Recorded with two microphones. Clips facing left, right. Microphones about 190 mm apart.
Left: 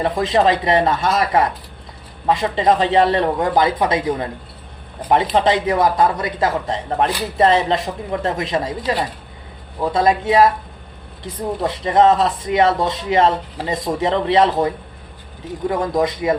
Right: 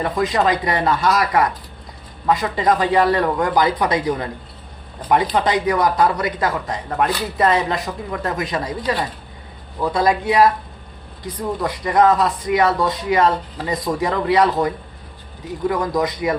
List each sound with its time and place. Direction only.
0.0 s speech: 25° left (ahead or behind)
15.7 s speech: 25° left (ahead or behind)